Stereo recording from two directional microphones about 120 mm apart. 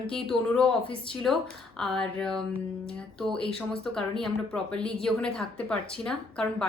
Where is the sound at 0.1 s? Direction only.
5° left (ahead or behind).